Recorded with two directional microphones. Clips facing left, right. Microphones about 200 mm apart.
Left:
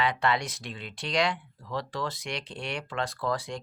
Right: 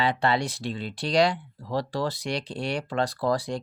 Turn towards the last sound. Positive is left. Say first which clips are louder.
# right 5 dB
turn(degrees=-35)  # may be behind; listen again after turning